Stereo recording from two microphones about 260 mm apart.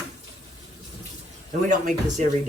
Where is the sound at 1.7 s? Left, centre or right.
Right.